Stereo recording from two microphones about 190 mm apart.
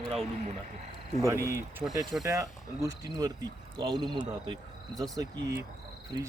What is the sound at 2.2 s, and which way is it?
Speech, 15° right (ahead or behind).